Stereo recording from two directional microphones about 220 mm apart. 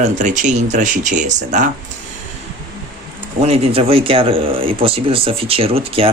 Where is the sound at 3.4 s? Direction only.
25° right (ahead or behind).